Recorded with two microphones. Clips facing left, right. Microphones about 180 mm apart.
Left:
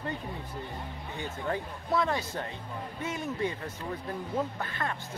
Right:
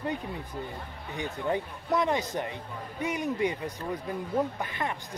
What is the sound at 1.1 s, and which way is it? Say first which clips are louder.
Speech: right 4 dB; 20° right (ahead or behind).